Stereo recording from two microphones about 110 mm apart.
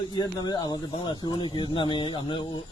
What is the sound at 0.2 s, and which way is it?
Speech, 35° left (ahead or behind).